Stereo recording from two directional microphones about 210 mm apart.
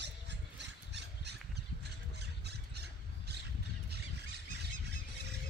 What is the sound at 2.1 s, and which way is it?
Squawk, 50° right (ahead or behind).